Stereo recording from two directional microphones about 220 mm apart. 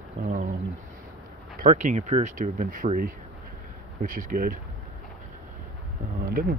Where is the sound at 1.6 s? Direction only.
35° right (ahead or behind).